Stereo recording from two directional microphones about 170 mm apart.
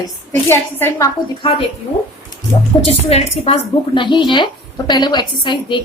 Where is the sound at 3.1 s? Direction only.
35° left (ahead or behind).